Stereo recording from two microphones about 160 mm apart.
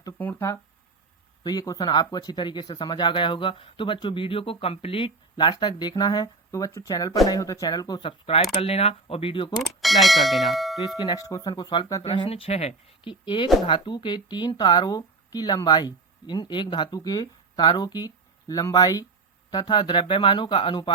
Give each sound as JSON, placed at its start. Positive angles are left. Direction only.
{"t": 0.2, "sound": "speech", "side_deg": 15}
{"t": 9.6, "sound": "speech", "side_deg": 0}
{"t": 10.8, "sound": "speech", "side_deg": 25}
{"t": 12.0, "sound": "speech", "side_deg": 35}
{"t": 13.2, "sound": "speech", "side_deg": 30}